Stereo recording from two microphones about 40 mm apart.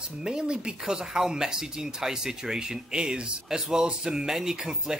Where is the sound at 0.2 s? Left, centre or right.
Centre.